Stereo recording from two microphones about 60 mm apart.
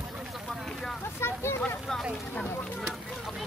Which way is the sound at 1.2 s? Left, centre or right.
Left.